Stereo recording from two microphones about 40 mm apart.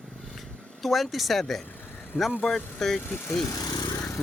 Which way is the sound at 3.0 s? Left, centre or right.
Left.